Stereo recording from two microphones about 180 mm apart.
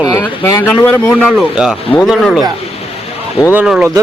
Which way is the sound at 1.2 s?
5° right (ahead or behind).